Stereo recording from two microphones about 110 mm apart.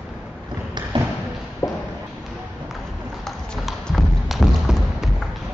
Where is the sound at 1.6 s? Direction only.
35° left (ahead or behind).